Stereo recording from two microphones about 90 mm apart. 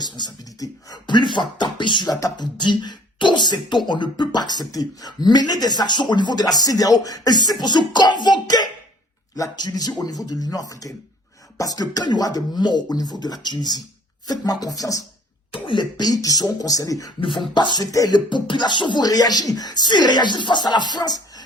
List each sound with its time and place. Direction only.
0.0 s speech: 45° left (ahead or behind)
1.1 s speech: 60° left (ahead or behind); by 15.0 s 40° left (ahead or behind)
15.5 s speech: 65° left (ahead or behind); by 17.1 s 40° left (ahead or behind)
17.2 s speech: 65° left (ahead or behind)
17.9 s speech: 40° left (ahead or behind)
18.3 s speech: 60° left (ahead or behind)